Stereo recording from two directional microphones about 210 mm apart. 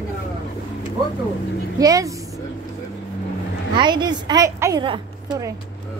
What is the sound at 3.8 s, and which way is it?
A woman's voice, 20° right (ahead or behind).